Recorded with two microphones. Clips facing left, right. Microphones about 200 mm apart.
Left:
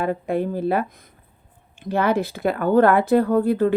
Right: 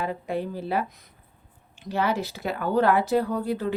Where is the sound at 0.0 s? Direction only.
55° left (ahead or behind).